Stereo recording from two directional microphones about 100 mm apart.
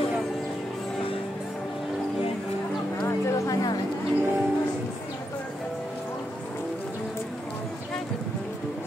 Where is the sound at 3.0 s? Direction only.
30° left (ahead or behind).